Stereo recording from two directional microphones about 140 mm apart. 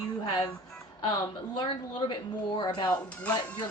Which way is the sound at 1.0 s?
30° left (ahead or behind).